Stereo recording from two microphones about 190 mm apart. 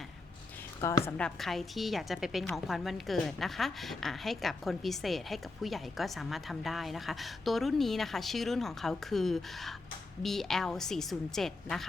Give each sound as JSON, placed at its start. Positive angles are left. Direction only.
{"t": 0.8, "sound": "a woman's voice", "side_deg": 15}
{"t": 1.1, "sound": "a woman's voice", "side_deg": 5}